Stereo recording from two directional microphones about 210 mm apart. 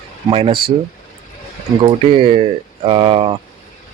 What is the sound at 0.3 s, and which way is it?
Speech, 25° right (ahead or behind).